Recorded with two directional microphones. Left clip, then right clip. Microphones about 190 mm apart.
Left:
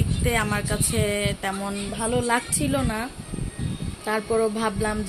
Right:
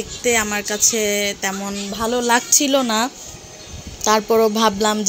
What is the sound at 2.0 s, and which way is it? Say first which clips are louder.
Speech: right 6 dB; 25° right (ahead or behind).